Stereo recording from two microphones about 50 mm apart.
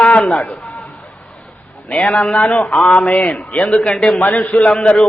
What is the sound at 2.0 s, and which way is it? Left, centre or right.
Speech, centre.